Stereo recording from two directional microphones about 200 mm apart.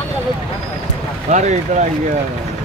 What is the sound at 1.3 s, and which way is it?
Speech, 35° right (ahead or behind).